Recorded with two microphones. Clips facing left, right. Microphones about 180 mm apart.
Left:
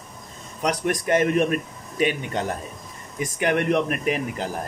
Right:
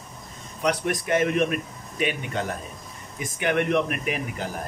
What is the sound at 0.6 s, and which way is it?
Speech, 40° left (ahead or behind).